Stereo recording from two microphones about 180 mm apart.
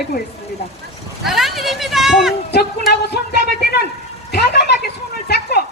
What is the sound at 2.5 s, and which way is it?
Speech, 65° left (ahead or behind).